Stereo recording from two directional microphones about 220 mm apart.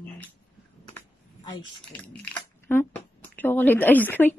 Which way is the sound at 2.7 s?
10° left (ahead or behind).